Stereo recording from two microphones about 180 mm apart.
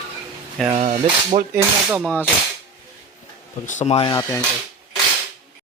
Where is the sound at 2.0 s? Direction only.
10° left (ahead or behind).